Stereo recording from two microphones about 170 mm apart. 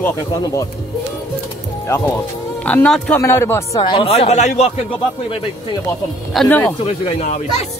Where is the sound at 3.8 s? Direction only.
30° left (ahead or behind).